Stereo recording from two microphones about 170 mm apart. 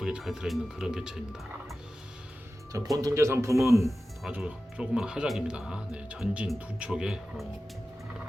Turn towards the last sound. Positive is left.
turn(degrees=-5)  # may be behind; listen again after turning